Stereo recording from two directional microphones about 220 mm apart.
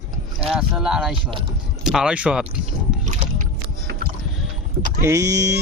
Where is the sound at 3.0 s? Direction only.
30° right (ahead or behind).